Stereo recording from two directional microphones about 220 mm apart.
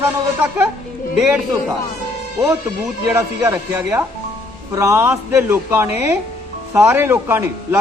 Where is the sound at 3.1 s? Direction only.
15° right (ahead or behind).